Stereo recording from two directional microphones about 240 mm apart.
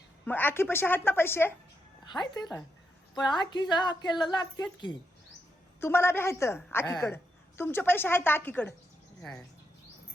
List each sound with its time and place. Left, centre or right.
0.3 s a woman's voice: centre